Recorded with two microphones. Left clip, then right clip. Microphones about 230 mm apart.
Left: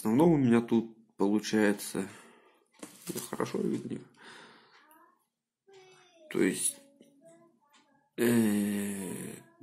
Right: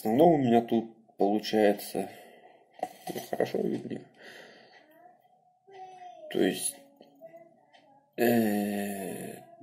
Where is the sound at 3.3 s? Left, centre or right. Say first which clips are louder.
Right 4 dB; left.